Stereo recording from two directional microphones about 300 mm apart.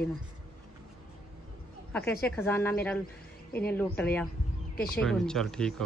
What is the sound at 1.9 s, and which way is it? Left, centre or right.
A woman's voice, centre.